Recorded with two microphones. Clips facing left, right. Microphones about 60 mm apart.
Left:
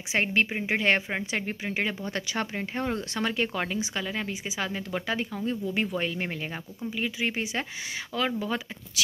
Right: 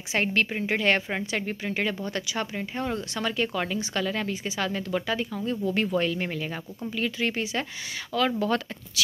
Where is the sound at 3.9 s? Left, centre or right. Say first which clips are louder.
Right 4 dB; centre.